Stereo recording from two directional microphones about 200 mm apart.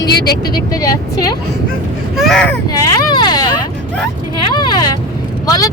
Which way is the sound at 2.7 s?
20° left (ahead or behind).